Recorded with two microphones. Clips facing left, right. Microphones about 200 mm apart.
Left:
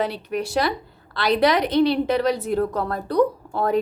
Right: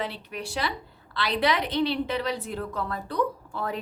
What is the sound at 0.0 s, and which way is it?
A woman's voice, 45° left (ahead or behind).